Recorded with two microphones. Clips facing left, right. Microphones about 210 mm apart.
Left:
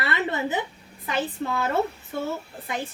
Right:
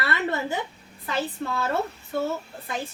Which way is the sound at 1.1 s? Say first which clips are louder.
Left 1 dB; 15° left (ahead or behind).